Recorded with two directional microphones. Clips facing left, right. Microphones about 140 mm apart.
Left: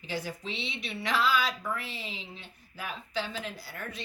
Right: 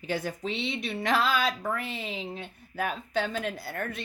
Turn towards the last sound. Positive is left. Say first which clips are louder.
# right 6 dB
turn(degrees=-55)  # may be behind; listen again after turning